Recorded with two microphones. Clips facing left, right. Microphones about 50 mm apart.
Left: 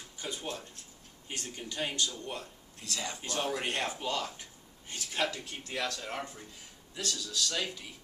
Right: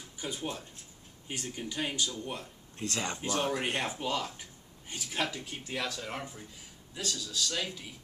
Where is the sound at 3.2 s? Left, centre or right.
Centre.